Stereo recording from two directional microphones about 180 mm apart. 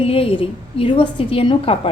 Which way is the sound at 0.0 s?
30° left (ahead or behind).